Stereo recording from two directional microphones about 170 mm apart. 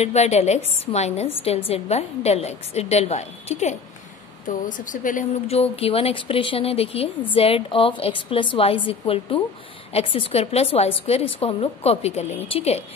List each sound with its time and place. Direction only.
0.0 s a woman's voice: 40° left (ahead or behind)
5.6 s a woman's voice: 35° left (ahead or behind)